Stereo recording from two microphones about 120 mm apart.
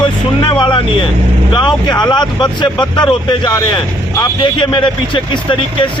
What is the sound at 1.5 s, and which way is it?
Speech, 40° left (ahead or behind).